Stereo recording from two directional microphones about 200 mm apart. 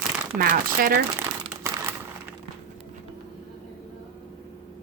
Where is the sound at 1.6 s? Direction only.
15° right (ahead or behind).